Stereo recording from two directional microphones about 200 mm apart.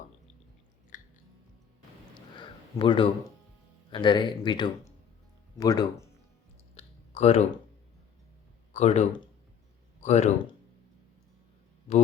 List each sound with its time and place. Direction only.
0.9 s chewing: 40° left (ahead or behind)
2.1 s a sound: 20° left (ahead or behind)
3.9 s speech: 25° left (ahead or behind)
6.7 s clicking: 30° left (ahead or behind)
8.7 s speech: 35° left (ahead or behind)